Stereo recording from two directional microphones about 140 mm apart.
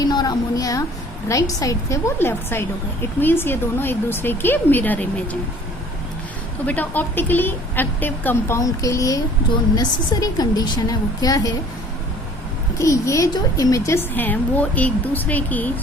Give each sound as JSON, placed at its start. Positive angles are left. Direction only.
{"t": 0.0, "sound": "a woman's voice", "side_deg": 30}
{"t": 6.7, "sound": "a woman's voice", "side_deg": 10}
{"t": 12.8, "sound": "a woman's voice", "side_deg": 20}